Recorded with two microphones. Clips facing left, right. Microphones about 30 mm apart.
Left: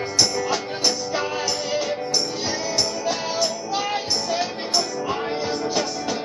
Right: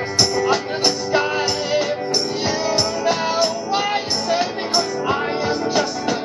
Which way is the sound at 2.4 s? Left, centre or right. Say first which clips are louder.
Right 5 dB; right.